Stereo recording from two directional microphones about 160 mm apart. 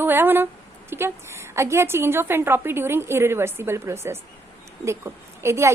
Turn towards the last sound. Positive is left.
turn(degrees=-15)  # may be behind; listen again after turning